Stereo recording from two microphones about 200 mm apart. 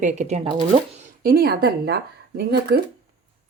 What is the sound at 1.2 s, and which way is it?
Speech, 50° right (ahead or behind).